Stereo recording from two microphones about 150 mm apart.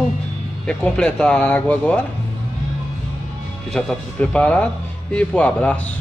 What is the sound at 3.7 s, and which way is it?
Speech, 5° left (ahead or behind).